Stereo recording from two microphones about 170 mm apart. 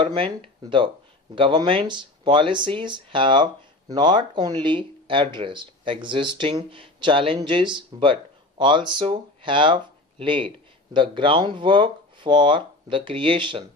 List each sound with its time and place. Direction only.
0.0 s speech: 30° right (ahead or behind)